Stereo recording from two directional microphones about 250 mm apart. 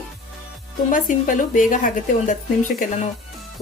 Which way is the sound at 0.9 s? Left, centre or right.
Left.